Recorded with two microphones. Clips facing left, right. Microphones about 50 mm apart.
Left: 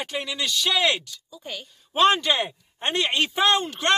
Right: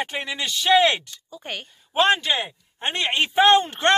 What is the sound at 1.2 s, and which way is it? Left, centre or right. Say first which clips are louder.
Speech: right 6 dB; right.